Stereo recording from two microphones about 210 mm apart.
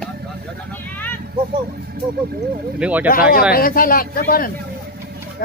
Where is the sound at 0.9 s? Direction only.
10° left (ahead or behind).